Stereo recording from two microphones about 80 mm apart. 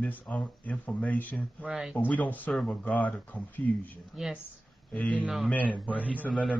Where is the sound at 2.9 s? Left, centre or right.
Centre.